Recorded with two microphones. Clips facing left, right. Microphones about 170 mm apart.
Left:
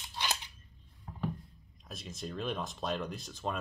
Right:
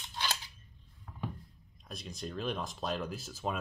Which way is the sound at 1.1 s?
30° left (ahead or behind).